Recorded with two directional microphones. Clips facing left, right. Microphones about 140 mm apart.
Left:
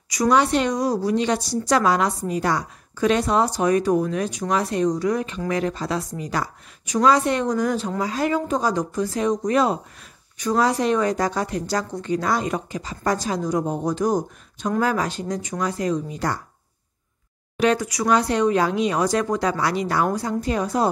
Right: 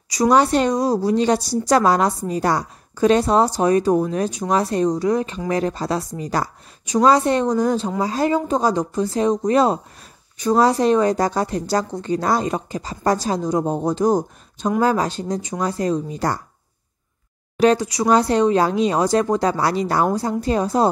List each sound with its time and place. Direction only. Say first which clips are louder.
0.1 s speech: right 3 dB; 35° right (ahead or behind)
17.6 s speech: right 4 dB; 30° right (ahead or behind)